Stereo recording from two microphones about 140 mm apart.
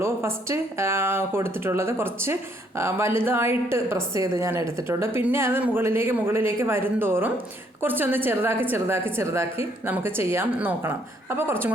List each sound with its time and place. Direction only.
0.0 s a woman's voice: 20° right (ahead or behind)